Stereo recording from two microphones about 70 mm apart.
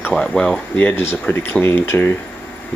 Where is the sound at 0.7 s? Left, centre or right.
Left.